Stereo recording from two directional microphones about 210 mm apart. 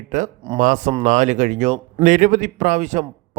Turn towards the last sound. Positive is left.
turn(degrees=-35)  # may be behind; listen again after turning